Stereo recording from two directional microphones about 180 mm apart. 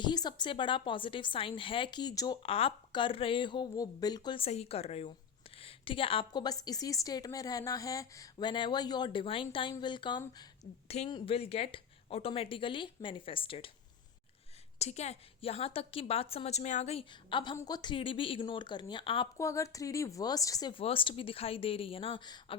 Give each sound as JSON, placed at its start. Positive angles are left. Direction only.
{"t": 0.0, "sound": "a woman's voice", "side_deg": 25}
{"t": 10.8, "sound": "a woman's voice", "side_deg": 35}
{"t": 14.8, "sound": "a woman's voice", "side_deg": 40}
{"t": 19.4, "sound": "a woman's voice", "side_deg": 15}